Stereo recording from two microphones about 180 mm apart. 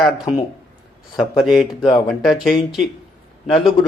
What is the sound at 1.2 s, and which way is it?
Speech, centre (ahead or behind).